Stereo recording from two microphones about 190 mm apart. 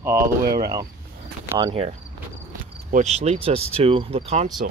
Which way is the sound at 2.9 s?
35° right (ahead or behind).